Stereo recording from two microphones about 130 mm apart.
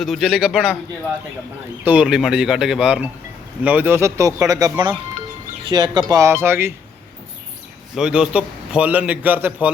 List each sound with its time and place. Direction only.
0.0 s speech: centre (ahead or behind)
1.8 s speech: 10° right (ahead or behind)
7.9 s a man's voice: 5° right (ahead or behind)